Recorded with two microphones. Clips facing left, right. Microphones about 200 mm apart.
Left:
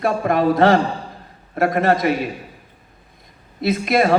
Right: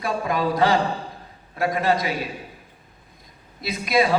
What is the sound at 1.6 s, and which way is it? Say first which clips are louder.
Speech: left 5 dB; 50° left (ahead or behind).